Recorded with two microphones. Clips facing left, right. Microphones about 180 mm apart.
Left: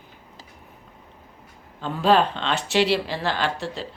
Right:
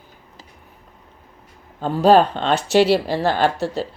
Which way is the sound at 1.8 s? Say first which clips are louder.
Right 6 dB; 40° right (ahead or behind).